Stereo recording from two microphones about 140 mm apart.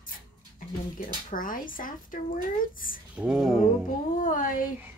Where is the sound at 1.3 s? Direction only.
75° left (ahead or behind).